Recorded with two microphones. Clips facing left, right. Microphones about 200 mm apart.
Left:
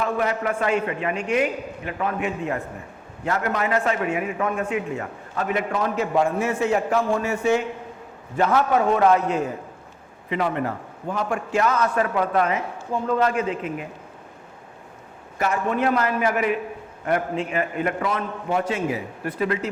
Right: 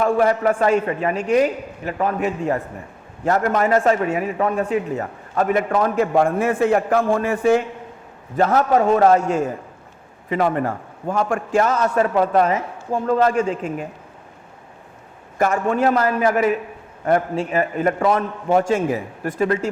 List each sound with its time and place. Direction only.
0.2 s a man's voice: 40° right (ahead or behind)
8.4 s a man's voice: 40° right (ahead or behind)
15.4 s a man's voice: 45° right (ahead or behind)